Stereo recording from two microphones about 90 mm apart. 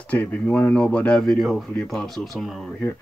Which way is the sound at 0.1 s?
15° left (ahead or behind).